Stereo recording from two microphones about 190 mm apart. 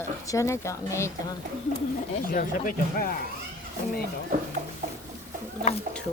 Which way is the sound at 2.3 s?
45° left (ahead or behind).